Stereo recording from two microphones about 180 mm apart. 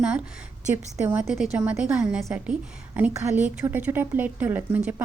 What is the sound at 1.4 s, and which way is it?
A woman's voice, 5° right (ahead or behind).